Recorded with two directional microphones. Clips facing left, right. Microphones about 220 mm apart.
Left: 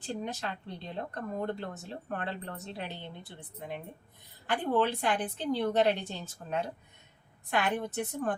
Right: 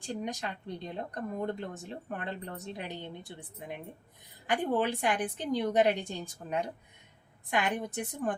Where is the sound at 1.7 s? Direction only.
15° right (ahead or behind).